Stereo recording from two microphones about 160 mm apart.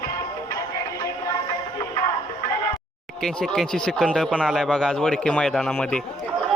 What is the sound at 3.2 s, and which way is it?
Speech, 5° left (ahead or behind).